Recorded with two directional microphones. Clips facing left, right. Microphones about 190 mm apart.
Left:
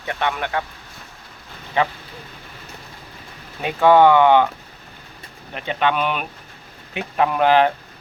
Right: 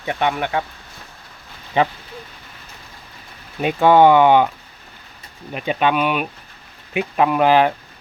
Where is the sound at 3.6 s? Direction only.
15° right (ahead or behind).